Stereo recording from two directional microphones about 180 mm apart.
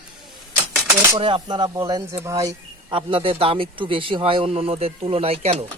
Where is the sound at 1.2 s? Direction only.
30° right (ahead or behind).